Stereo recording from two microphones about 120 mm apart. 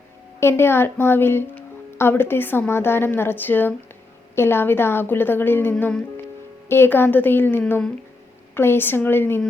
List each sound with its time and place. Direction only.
0.3 s a woman's voice: 20° left (ahead or behind)
5.7 s a woman's voice: 5° left (ahead or behind)
6.7 s a woman's voice: 20° left (ahead or behind)